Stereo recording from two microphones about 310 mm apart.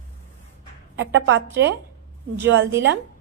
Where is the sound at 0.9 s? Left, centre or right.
Right.